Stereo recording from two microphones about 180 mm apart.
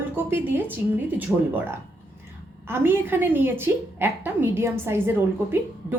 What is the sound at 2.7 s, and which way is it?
A woman's voice, 10° right (ahead or behind).